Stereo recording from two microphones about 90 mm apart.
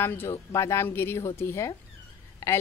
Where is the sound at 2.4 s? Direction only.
30° left (ahead or behind).